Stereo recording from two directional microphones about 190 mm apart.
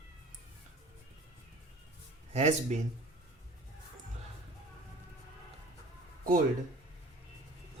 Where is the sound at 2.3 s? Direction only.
35° right (ahead or behind).